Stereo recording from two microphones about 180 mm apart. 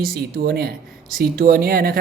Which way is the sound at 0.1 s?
60° right (ahead or behind).